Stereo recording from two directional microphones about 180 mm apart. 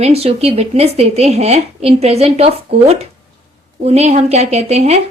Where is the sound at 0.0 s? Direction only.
35° right (ahead or behind).